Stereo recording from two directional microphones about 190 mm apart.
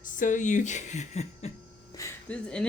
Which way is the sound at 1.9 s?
15° left (ahead or behind).